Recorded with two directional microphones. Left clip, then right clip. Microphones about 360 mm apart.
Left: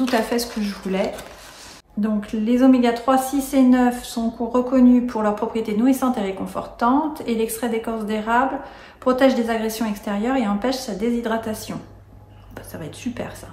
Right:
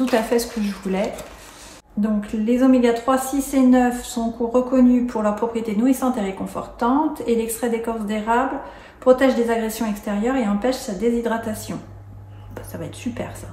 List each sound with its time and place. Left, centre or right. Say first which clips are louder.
0.0 s speech: right 2 dB; centre
12.7 s speech: right 1 dB; centre